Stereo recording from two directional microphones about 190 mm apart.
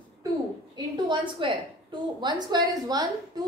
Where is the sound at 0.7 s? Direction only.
20° right (ahead or behind).